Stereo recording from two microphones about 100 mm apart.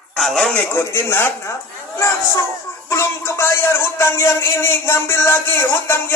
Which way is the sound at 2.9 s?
25° left (ahead or behind).